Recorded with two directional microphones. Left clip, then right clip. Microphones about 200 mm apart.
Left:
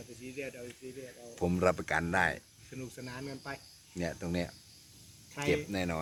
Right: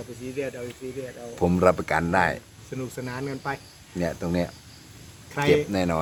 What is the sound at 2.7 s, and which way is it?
Speech, 50° right (ahead or behind).